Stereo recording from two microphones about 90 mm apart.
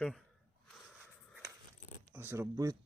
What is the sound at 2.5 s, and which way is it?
Speech, 40° right (ahead or behind).